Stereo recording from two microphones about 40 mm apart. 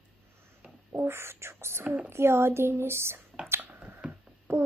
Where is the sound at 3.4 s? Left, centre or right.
Right.